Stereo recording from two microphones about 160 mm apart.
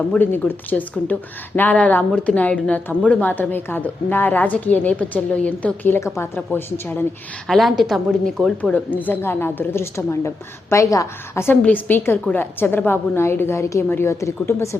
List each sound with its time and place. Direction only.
0.1 s speech: 10° left (ahead or behind)
7.4 s speech: centre (ahead or behind); by 14.8 s 20° left (ahead or behind)